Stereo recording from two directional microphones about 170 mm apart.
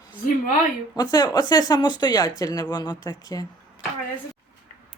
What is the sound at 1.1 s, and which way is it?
Speech, 25° left (ahead or behind).